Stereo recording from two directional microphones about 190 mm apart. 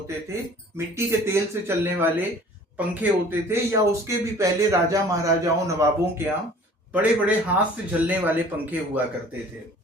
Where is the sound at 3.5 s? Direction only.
15° right (ahead or behind).